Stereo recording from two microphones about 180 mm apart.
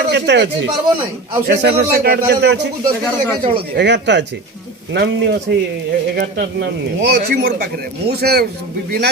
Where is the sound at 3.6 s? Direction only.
70° right (ahead or behind).